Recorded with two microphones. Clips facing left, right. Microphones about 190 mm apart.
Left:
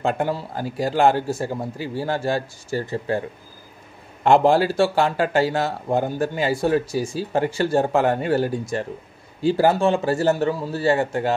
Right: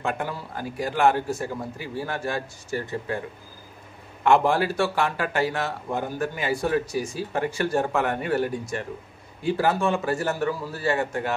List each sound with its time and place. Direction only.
0.0 s speech: 30° left (ahead or behind)
4.2 s speech: 30° left (ahead or behind)